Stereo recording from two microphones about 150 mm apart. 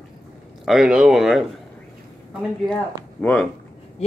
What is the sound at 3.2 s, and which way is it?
Speech, 5° left (ahead or behind).